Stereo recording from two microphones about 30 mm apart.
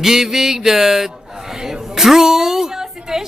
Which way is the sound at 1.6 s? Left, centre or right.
Centre.